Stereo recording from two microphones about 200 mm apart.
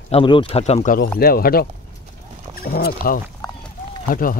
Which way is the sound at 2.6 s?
50° left (ahead or behind).